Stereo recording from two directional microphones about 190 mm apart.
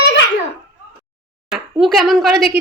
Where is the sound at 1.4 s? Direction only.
Centre (ahead or behind).